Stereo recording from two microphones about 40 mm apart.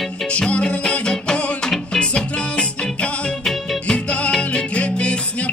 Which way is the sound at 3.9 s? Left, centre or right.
Left.